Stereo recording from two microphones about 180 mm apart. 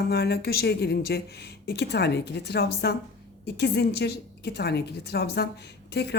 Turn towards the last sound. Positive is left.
turn(degrees=65)  # may be behind; listen again after turning